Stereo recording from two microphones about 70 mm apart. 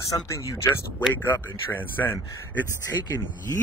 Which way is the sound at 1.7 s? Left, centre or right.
Left.